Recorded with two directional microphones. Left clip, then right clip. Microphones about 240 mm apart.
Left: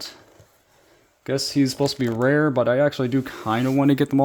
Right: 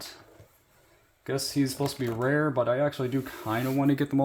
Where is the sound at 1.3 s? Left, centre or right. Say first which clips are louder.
Left 7 dB; left.